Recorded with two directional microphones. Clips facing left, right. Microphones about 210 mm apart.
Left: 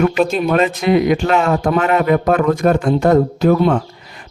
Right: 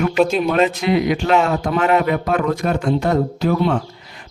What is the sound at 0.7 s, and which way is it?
Speech, 50° left (ahead or behind).